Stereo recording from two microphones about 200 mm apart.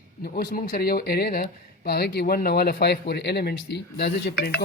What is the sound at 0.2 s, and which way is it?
Speech, 45° left (ahead or behind).